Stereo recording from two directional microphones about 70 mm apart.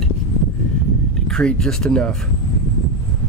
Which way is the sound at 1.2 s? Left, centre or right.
Centre.